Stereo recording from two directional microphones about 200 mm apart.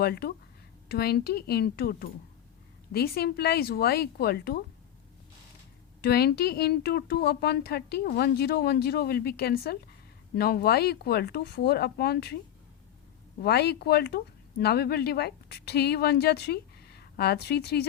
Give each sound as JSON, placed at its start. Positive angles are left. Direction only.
{"t": 0.0, "sound": "speech", "side_deg": 50}
{"t": 6.0, "sound": "speech", "side_deg": 50}
{"t": 13.4, "sound": "speech", "side_deg": 55}